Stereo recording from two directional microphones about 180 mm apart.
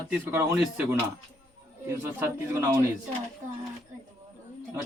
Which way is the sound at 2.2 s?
15° right (ahead or behind).